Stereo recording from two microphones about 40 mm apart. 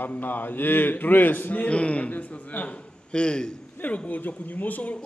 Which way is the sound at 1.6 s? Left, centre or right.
Left.